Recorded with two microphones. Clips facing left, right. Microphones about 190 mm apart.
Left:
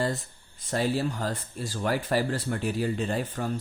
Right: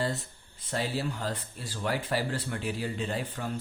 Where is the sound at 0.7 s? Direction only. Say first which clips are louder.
Left 5 dB; 45° left (ahead or behind).